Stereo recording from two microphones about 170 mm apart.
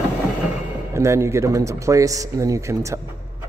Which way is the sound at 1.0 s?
15° right (ahead or behind).